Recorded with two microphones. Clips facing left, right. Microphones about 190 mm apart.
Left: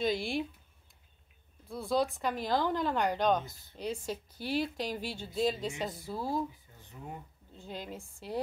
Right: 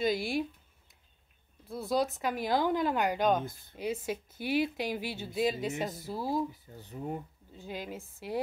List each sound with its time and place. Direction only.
0.0 s speech: centre (ahead or behind)
1.7 s speech: centre (ahead or behind)
6.5 s speech: 40° right (ahead or behind)
7.5 s speech: 5° right (ahead or behind)